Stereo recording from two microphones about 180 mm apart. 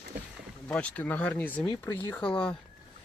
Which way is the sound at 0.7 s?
10° left (ahead or behind).